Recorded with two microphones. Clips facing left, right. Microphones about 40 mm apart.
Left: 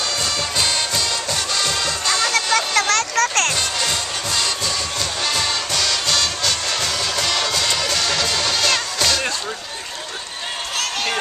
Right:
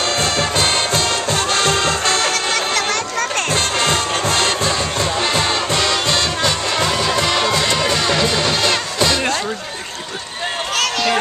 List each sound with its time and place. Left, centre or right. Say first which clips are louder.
0.2 s music: right 4 dB; right
2.5 s music: left 1 dB; centre
3.5 s music: right 5 dB; right
5.2 s music: right 2 dB; right